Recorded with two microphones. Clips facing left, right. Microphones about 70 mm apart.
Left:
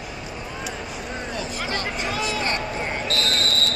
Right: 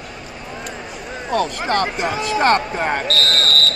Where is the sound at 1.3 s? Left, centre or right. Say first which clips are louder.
Right 12 dB; right.